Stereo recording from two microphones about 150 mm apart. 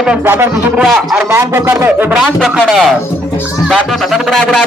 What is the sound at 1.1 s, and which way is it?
A man's voice, 20° right (ahead or behind).